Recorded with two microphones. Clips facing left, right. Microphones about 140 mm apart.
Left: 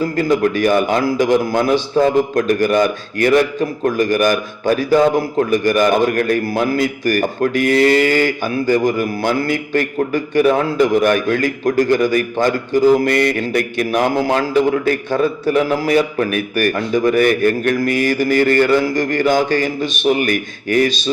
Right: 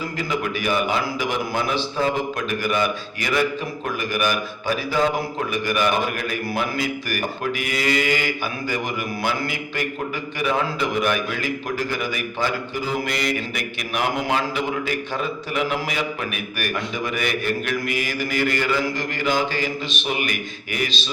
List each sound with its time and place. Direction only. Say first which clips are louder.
0.2 s a man's voice: left 11 dB; 45° left (ahead or behind)